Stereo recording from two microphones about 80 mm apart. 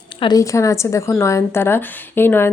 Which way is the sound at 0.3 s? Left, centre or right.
Left.